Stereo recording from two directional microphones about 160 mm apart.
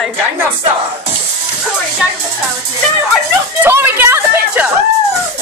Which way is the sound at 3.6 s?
15° right (ahead or behind).